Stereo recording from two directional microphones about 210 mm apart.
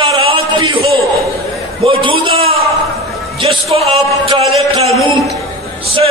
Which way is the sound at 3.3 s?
25° right (ahead or behind).